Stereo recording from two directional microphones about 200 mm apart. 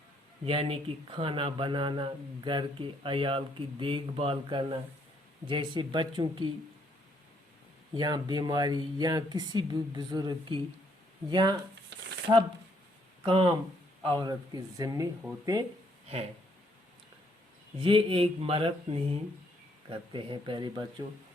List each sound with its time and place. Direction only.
0.4 s speech: 25° right (ahead or behind)
7.9 s speech: 20° right (ahead or behind)
13.2 s speech: 25° right (ahead or behind)
17.7 s speech: 25° right (ahead or behind)